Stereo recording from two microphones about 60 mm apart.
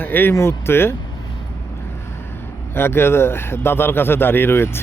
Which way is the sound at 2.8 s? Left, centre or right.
Left.